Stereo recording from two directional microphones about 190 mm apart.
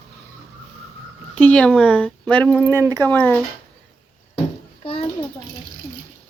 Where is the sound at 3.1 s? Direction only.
10° left (ahead or behind).